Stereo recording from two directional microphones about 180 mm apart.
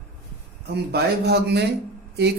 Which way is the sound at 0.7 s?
65° right (ahead or behind).